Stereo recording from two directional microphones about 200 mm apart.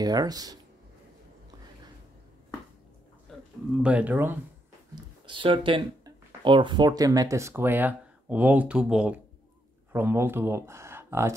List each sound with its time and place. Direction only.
0.0 s speech: 20° right (ahead or behind)
3.3 s a sound: 5° left (ahead or behind)
3.8 s speech: 5° right (ahead or behind)
4.9 s speech: 25° right (ahead or behind)